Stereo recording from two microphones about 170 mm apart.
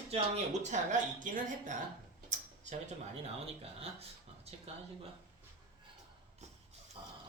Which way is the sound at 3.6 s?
35° right (ahead or behind).